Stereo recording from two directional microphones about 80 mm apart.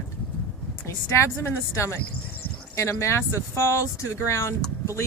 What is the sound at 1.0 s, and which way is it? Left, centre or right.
Speech, left.